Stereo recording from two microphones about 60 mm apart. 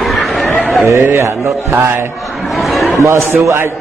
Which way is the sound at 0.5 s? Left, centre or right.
Left.